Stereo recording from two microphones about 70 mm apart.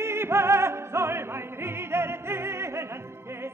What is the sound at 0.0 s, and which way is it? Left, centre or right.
Opera, right.